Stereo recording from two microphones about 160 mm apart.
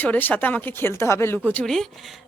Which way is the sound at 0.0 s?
10° left (ahead or behind).